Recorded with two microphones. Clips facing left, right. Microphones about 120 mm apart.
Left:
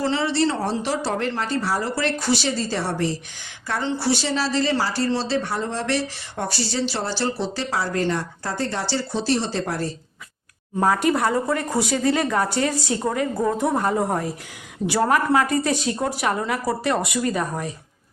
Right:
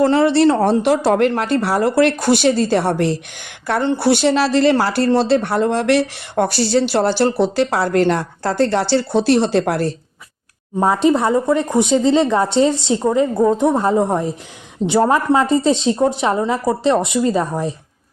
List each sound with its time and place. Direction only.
0.0 s speech: 55° right (ahead or behind)
10.8 s speech: 20° right (ahead or behind)